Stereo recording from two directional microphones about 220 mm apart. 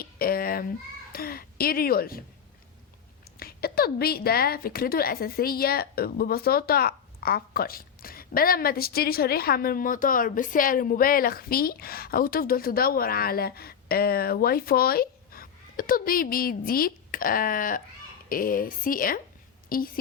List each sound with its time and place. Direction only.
0.0 s a sound: 40° left (ahead or behind)
1.1 s speech: 40° left (ahead or behind)
3.3 s a woman's voice: 45° left (ahead or behind)